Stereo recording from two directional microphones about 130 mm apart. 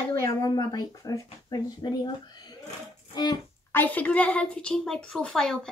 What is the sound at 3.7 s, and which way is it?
A woman's voice, 15° left (ahead or behind).